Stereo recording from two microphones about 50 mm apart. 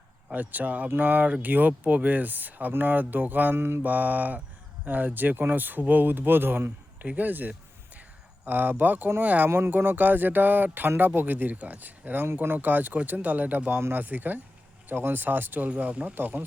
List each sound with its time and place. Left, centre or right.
0.3 s speech: right
3.5 s mantra: right
3.8 s speech: right
7.0 s speech: right
9.5 s speech: right